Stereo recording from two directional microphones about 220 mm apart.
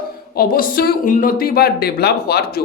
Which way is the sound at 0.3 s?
40° left (ahead or behind).